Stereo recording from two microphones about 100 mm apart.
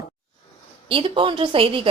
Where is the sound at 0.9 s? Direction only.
65° right (ahead or behind).